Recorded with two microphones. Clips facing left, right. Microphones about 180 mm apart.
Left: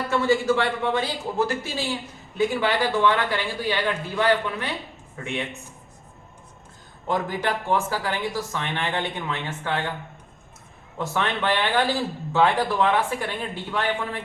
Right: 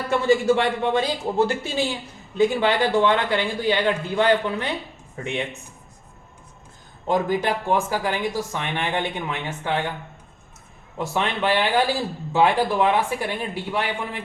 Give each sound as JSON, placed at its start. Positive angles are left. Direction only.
{"t": 0.4, "sound": "a man's voice", "side_deg": -20}
{"t": 7.1, "sound": "speech", "side_deg": -15}
{"t": 10.9, "sound": "speech", "side_deg": -15}